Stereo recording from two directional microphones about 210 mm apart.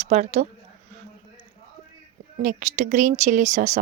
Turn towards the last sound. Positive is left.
turn(degrees=-35)  # may be behind; listen again after turning